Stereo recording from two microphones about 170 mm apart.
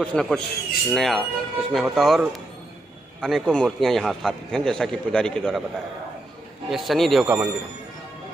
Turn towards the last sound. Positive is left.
turn(degrees=-5)  # may be behind; listen again after turning